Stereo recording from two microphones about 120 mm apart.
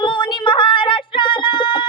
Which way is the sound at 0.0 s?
40° left (ahead or behind).